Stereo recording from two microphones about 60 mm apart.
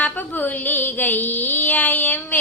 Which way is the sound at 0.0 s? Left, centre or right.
Left.